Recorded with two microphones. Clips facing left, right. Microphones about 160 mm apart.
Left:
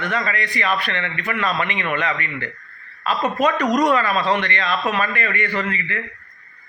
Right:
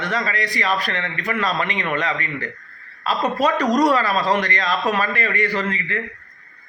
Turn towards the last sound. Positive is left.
turn(degrees=-35)  # may be behind; listen again after turning